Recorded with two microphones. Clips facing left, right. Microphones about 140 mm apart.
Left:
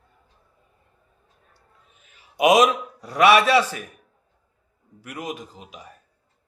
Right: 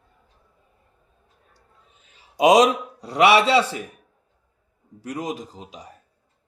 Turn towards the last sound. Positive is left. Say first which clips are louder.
# right 2 dB
turn(degrees=-25)  # may be behind; listen again after turning